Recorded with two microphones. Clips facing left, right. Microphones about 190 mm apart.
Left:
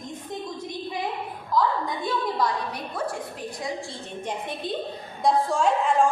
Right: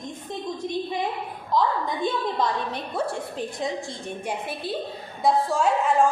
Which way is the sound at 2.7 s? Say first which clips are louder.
Right 2 dB; 25° right (ahead or behind).